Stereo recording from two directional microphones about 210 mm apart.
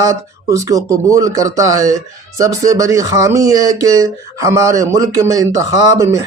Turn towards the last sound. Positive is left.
turn(degrees=-15)  # may be behind; listen again after turning